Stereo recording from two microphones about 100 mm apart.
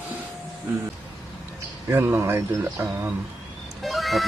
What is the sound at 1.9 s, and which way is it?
Speech, 25° right (ahead or behind).